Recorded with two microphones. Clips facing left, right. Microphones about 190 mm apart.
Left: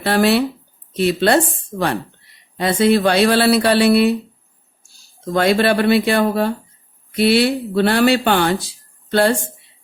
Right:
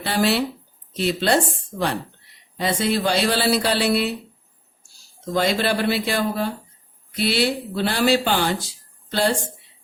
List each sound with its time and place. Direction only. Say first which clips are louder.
0.0 s speech: left 5 dB; 60° left (ahead or behind)
2.6 s speech: left 7 dB; 60° left (ahead or behind)
5.3 s speech: left 6 dB; 60° left (ahead or behind)